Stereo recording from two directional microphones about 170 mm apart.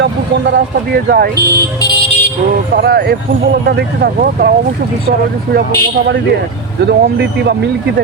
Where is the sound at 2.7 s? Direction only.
70° right (ahead or behind).